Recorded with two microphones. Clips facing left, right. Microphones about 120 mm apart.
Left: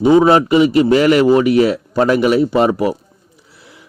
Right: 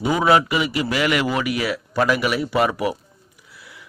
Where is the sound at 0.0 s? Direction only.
30° left (ahead or behind).